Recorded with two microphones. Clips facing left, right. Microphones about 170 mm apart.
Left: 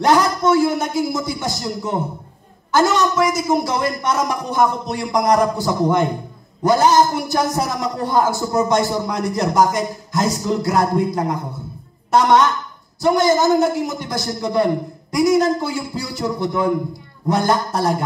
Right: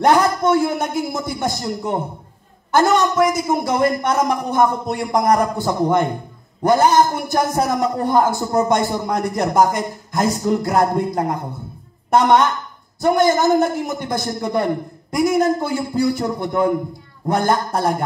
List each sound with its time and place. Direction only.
0.0 s a man's voice: 55° right (ahead or behind)